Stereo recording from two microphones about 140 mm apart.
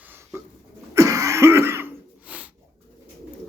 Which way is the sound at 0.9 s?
20° right (ahead or behind).